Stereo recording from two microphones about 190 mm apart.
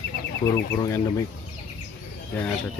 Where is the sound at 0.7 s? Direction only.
15° left (ahead or behind).